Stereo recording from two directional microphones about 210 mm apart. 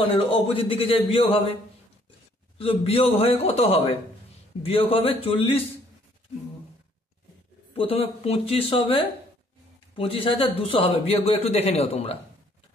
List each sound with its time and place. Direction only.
0.0 s speech: 25° left (ahead or behind)
2.6 s speech: 25° left (ahead or behind)
7.7 s speech: 25° left (ahead or behind)